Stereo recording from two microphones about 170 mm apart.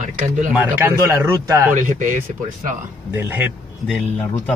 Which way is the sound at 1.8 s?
50° right (ahead or behind).